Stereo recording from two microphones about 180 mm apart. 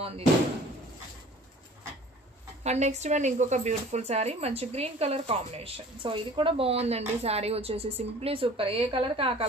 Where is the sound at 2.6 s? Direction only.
40° right (ahead or behind).